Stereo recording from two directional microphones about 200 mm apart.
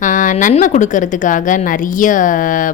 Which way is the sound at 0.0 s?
40° left (ahead or behind).